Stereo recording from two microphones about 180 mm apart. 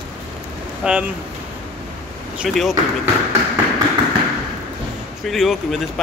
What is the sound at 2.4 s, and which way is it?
Speech, centre (ahead or behind).